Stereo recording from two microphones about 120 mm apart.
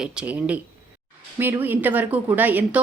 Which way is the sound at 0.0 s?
10° right (ahead or behind).